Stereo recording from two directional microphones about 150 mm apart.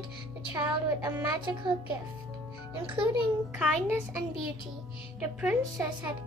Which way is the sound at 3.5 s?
10° right (ahead or behind).